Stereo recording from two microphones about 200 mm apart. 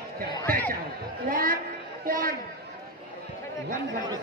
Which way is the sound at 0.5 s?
10° left (ahead or behind).